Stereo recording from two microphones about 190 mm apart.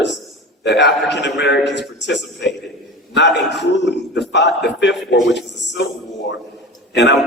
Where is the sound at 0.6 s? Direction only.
65° left (ahead or behind).